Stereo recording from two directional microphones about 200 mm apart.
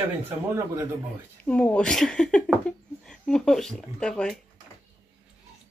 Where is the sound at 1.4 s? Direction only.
5° left (ahead or behind).